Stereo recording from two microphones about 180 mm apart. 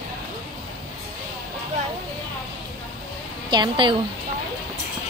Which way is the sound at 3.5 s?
25° right (ahead or behind).